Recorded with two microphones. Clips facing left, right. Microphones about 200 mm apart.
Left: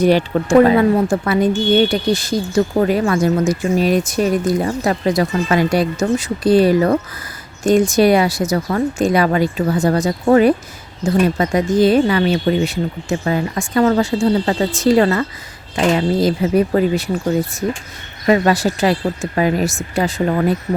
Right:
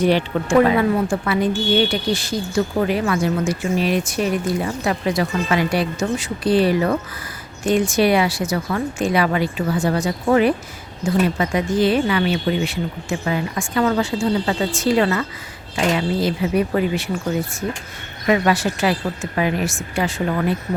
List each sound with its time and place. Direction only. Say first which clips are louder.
0.0 s speech: left 4 dB; 40° left (ahead or behind)
18.3 s speech: left 4 dB; 35° left (ahead or behind)